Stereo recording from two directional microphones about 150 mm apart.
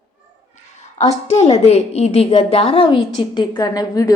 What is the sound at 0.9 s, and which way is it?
A woman's voice, 45° left (ahead or behind).